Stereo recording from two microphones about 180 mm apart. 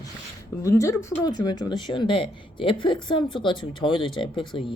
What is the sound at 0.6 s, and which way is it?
Speech, 15° left (ahead or behind).